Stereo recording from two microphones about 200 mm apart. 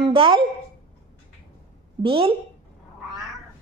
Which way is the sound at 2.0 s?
25° right (ahead or behind).